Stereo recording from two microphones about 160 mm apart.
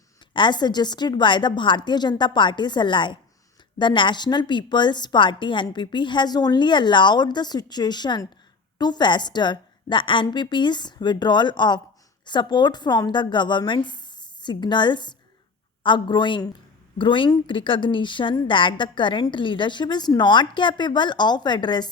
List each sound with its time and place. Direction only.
0.3 s a woman's voice: 30° left (ahead or behind)